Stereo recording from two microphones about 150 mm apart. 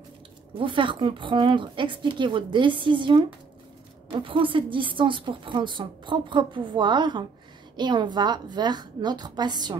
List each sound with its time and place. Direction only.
0.6 s a woman's voice: 35° right (ahead or behind)